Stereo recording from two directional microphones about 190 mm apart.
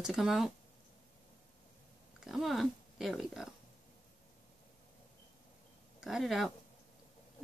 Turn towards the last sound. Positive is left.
turn(degrees=0)  # may be behind; listen again after turning